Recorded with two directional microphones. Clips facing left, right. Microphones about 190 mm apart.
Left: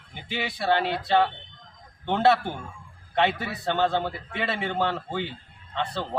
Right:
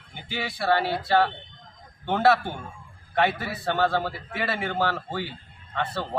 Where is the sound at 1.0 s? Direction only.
Centre (ahead or behind).